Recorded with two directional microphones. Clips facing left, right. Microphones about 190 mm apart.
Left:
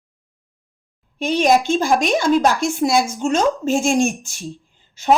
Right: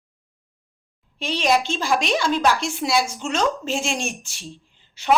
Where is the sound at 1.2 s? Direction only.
50° left (ahead or behind).